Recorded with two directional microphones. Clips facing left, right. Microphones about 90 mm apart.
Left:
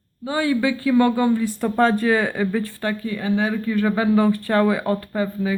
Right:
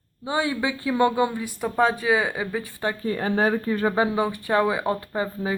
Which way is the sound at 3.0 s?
40° right (ahead or behind).